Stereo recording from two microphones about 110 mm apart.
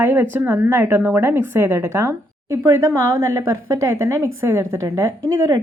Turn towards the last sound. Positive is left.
turn(degrees=-30)  # may be behind; listen again after turning